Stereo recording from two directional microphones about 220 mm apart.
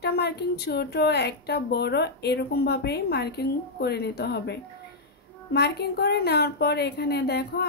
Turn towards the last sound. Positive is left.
turn(degrees=45)  # may be behind; listen again after turning